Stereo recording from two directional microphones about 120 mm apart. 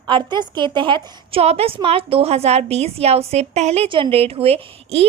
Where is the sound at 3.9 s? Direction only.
50° right (ahead or behind).